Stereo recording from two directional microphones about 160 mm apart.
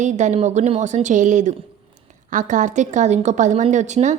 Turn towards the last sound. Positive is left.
turn(degrees=-45)  # may be behind; listen again after turning